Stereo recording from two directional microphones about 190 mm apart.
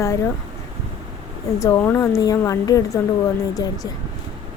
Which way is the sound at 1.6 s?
15° left (ahead or behind).